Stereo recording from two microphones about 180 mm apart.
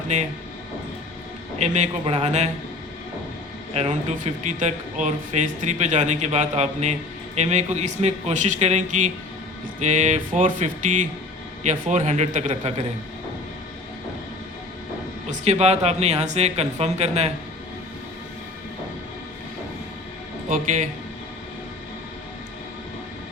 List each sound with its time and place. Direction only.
0.1 s speech: 40° right (ahead or behind)
1.5 s speech: 40° right (ahead or behind)
3.8 s speech: 40° right (ahead or behind)
15.3 s speech: 35° right (ahead or behind)